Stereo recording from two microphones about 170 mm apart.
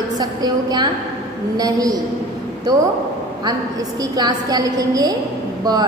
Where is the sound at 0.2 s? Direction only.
25° right (ahead or behind).